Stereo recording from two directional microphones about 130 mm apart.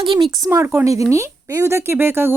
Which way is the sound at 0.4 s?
20° right (ahead or behind).